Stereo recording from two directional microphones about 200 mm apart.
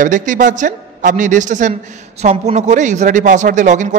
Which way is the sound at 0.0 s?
40° right (ahead or behind).